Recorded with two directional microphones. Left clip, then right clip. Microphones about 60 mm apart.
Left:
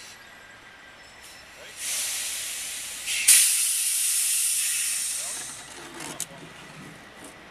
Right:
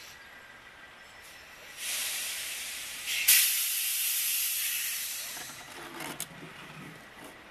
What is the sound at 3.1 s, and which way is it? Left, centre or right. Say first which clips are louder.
Hiss: left 4 dB; centre.